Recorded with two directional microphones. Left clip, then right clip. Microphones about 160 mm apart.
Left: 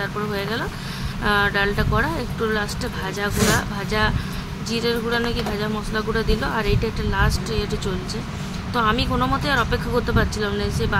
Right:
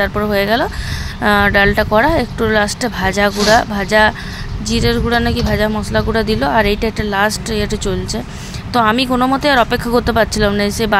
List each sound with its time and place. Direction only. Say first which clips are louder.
0.0 s speech: right 10 dB; 50° right (ahead or behind)